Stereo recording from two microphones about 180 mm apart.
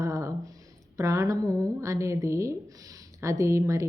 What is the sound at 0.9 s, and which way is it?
A woman's voice, 15° right (ahead or behind).